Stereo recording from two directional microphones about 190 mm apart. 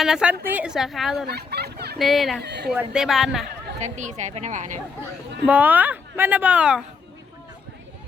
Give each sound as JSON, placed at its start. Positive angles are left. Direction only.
{"t": 0.0, "sound": "a woman's voice", "side_deg": -5}
{"t": 1.3, "sound": "fowl", "side_deg": -60}
{"t": 2.0, "sound": "a woman's voice", "side_deg": 0}
{"t": 2.4, "sound": "speech", "side_deg": -60}
{"t": 2.7, "sound": "a woman's voice", "side_deg": -5}
{"t": 3.8, "sound": "a woman's voice", "side_deg": -40}
{"t": 5.5, "sound": "speech", "side_deg": -10}